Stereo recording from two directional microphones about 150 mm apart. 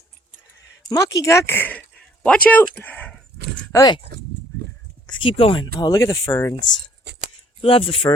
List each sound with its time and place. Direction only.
0.9 s speech: 20° left (ahead or behind)
3.7 s speech: 20° left (ahead or behind)
5.0 s speech: 35° left (ahead or behind)
7.6 s speech: 40° left (ahead or behind)